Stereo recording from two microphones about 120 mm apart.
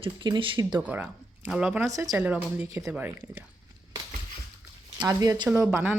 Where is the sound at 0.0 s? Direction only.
45° right (ahead or behind).